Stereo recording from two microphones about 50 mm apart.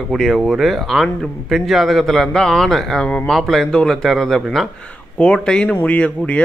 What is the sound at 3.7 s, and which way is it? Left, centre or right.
Speech, centre.